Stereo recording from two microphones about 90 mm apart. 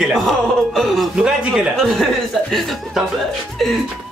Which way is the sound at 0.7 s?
Centre (ahead or behind).